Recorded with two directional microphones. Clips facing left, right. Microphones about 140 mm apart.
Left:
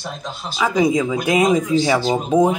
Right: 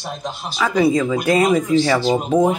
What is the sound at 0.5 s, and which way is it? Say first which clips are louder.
Speech: even; 10° left (ahead or behind).